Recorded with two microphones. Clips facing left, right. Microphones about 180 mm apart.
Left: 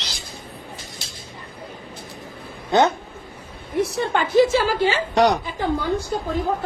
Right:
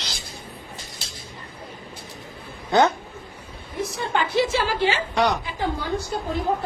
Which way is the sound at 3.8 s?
75° left (ahead or behind).